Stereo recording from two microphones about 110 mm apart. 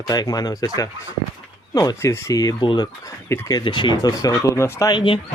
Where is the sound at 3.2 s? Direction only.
25° left (ahead or behind).